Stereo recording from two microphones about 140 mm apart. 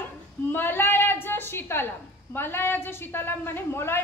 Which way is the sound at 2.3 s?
15° left (ahead or behind).